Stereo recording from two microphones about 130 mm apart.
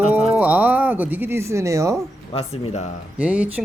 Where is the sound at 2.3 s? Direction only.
50° left (ahead or behind).